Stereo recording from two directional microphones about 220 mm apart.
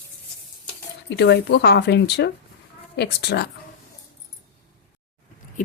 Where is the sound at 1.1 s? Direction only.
50° left (ahead or behind).